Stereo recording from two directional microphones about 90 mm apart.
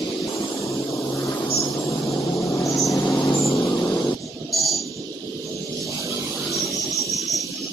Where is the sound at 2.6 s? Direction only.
35° left (ahead or behind).